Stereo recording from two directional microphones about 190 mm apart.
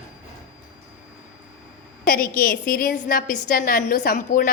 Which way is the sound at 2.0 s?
50° left (ahead or behind).